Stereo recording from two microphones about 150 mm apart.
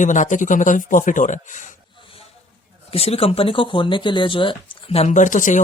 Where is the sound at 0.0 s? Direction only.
55° left (ahead or behind).